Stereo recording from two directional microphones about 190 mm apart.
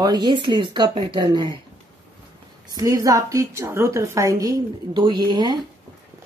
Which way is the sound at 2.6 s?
20° right (ahead or behind).